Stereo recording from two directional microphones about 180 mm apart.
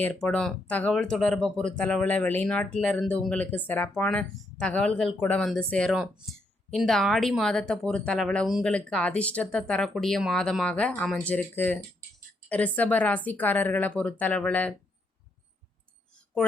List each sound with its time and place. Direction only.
0.0 s speech: 5° left (ahead or behind)